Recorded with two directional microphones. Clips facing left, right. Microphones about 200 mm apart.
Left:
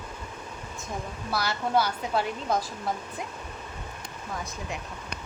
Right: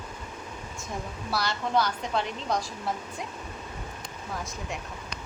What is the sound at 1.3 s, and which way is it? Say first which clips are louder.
A woman's voice: left 1 dB; 5° left (ahead or behind).